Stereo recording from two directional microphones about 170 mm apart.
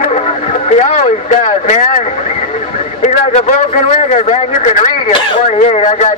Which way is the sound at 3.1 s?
40° left (ahead or behind).